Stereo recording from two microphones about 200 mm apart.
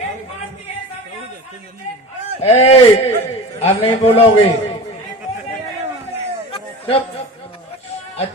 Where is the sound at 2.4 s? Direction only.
30° left (ahead or behind).